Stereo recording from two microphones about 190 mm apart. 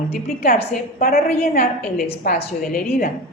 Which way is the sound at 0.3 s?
50° left (ahead or behind).